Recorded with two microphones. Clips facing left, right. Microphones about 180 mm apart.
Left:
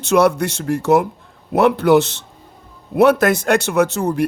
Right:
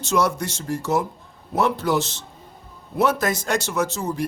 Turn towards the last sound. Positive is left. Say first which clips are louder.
# left 8 dB
turn(degrees=65)  # may be behind; listen again after turning